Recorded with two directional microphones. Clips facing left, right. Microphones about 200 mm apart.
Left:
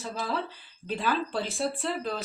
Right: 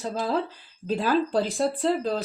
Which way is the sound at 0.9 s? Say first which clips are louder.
Right 6 dB; 40° right (ahead or behind).